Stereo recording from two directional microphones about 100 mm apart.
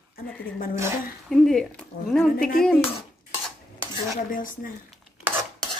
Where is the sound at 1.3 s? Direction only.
5° left (ahead or behind).